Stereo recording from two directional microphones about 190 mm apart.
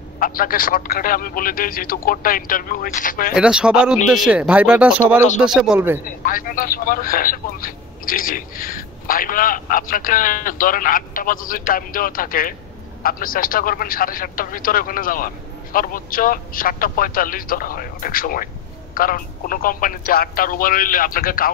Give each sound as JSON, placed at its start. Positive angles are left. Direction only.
{"t": 0.2, "sound": "speech", "side_deg": 50}
{"t": 3.3, "sound": "speech", "side_deg": -5}
{"t": 6.0, "sound": "speech", "side_deg": 50}